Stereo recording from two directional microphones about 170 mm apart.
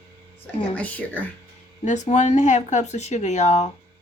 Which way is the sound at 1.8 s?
45° left (ahead or behind).